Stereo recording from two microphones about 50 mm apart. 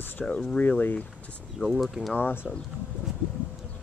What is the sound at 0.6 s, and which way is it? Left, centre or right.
Mantra, left.